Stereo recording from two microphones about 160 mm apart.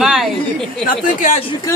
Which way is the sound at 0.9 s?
50° left (ahead or behind).